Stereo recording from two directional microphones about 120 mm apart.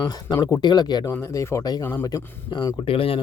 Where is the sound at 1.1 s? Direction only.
25° left (ahead or behind).